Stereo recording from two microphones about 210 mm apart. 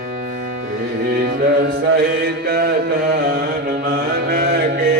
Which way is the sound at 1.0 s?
50° right (ahead or behind).